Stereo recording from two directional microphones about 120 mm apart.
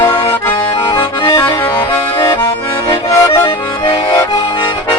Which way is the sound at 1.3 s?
30° left (ahead or behind).